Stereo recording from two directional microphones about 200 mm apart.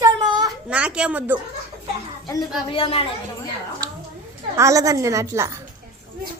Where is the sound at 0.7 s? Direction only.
5° right (ahead or behind).